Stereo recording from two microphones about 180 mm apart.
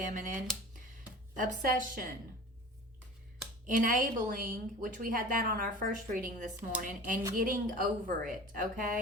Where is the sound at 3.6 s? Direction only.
45° right (ahead or behind).